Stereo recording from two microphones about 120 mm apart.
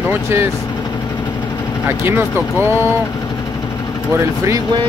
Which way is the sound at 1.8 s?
20° right (ahead or behind).